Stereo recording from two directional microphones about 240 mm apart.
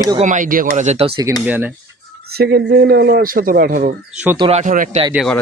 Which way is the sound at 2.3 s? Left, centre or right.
Right.